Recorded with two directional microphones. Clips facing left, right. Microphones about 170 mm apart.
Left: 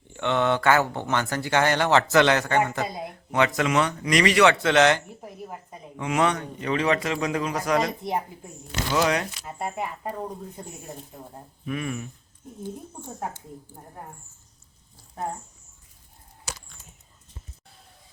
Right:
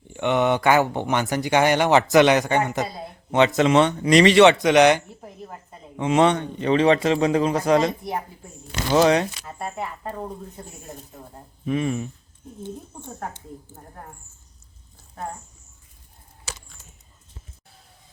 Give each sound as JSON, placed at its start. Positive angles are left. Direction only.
{"t": 0.1, "sound": "a man's voice", "side_deg": -15}
{"t": 4.5, "sound": "speech", "side_deg": -15}
{"t": 5.0, "sound": "a sound", "side_deg": 10}
{"t": 6.0, "sound": "a man's voice", "side_deg": -25}
{"t": 9.4, "sound": "speech", "side_deg": 15}
{"t": 11.6, "sound": "a man's voice", "side_deg": -25}